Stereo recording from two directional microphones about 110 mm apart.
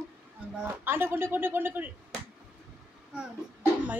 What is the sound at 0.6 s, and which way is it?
Speech, 20° right (ahead or behind).